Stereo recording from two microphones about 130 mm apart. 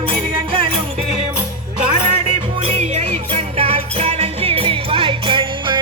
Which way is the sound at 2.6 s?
55° right (ahead or behind).